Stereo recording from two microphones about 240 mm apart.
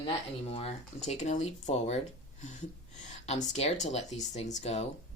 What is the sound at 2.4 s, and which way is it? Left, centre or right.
Gasp, left.